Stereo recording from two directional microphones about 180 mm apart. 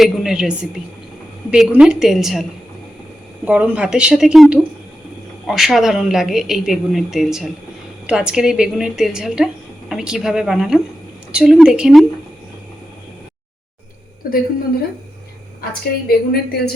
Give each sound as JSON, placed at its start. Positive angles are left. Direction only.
{"t": 0.0, "sound": "speech", "side_deg": 0}
{"t": 14.2, "sound": "a woman's voice", "side_deg": 50}
{"t": 16.0, "sound": "a woman's voice", "side_deg": 60}